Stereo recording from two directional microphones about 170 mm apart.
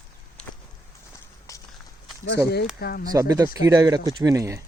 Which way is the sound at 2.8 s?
65° left (ahead or behind).